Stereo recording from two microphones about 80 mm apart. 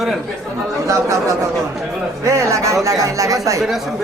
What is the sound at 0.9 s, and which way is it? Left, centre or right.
Speech, right.